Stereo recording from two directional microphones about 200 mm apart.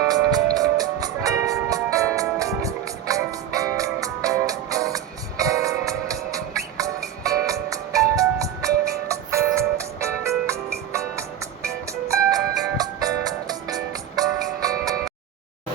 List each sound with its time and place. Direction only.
0.1 s music: 20° right (ahead or behind)